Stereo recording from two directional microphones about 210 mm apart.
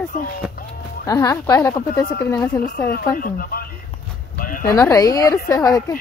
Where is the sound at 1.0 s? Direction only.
15° left (ahead or behind).